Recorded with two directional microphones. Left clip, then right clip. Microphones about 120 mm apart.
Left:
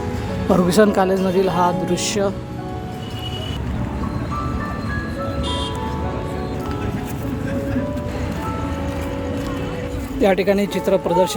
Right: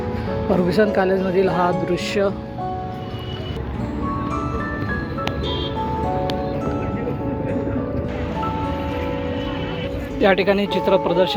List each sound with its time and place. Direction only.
0.5 s speech: 25° left (ahead or behind)
1.0 s speech: 10° left (ahead or behind)
10.2 s speech: 20° left (ahead or behind)